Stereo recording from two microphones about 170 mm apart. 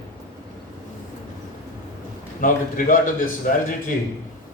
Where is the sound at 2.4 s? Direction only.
50° left (ahead or behind).